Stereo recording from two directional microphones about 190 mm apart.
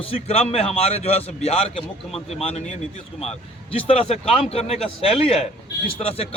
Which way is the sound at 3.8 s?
30° left (ahead or behind).